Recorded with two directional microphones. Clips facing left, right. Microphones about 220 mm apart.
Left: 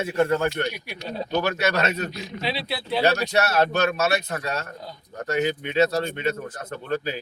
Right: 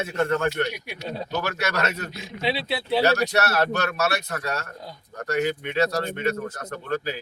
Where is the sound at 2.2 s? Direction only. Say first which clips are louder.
Right 2 dB; 20° right (ahead or behind).